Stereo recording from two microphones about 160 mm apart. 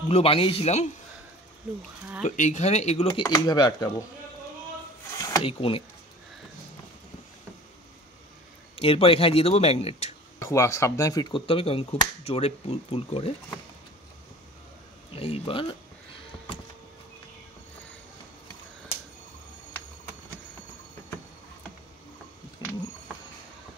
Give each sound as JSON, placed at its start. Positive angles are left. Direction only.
{"t": 0.1, "sound": "speech", "side_deg": 35}
{"t": 2.2, "sound": "speech", "side_deg": 50}
{"t": 3.1, "sound": "speech", "side_deg": 25}
{"t": 5.4, "sound": "speech", "side_deg": 35}
{"t": 8.7, "sound": "speech", "side_deg": 35}
{"t": 10.4, "sound": "speech", "side_deg": 20}
{"t": 15.0, "sound": "speech", "side_deg": 35}
{"t": 22.6, "sound": "a sound", "side_deg": 25}